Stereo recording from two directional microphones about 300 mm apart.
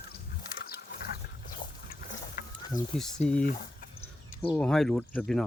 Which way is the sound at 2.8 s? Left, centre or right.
Left.